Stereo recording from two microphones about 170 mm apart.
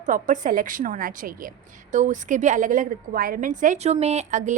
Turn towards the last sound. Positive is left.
turn(degrees=-45)  # may be behind; listen again after turning